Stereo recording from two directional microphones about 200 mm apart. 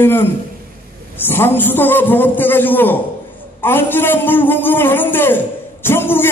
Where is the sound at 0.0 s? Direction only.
10° left (ahead or behind).